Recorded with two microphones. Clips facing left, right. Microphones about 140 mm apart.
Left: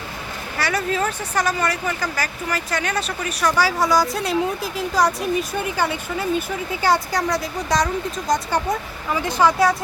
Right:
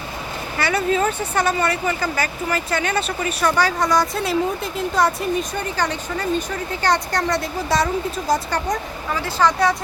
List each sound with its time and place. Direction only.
0.6 s speech: centre (ahead or behind)
8.4 s speech: 10° left (ahead or behind)